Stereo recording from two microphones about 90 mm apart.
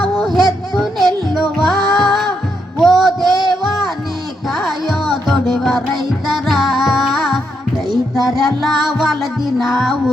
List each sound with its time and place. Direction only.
0.0 s music: centre (ahead or behind)
2.8 s a sound: centre (ahead or behind)
4.4 s music: centre (ahead or behind)